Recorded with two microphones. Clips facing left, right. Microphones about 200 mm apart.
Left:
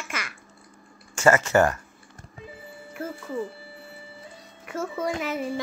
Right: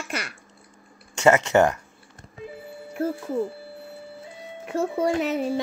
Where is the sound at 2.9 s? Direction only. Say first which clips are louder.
Right 6 dB; 60° right (ahead or behind).